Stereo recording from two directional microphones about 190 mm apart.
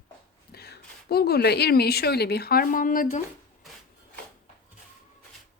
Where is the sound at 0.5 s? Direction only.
55° left (ahead or behind).